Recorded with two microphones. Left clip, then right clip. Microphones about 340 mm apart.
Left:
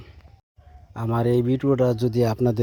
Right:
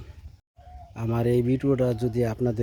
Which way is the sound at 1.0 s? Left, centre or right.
Centre.